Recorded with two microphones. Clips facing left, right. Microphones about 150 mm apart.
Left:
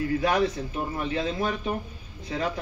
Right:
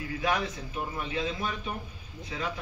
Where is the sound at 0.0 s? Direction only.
40° left (ahead or behind).